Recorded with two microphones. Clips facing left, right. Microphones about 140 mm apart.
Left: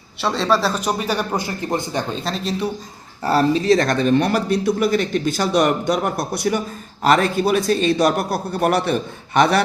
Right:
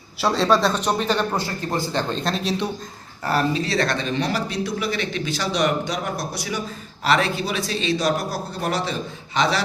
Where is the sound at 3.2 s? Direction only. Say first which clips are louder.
Left 5 dB; 30° left (ahead or behind).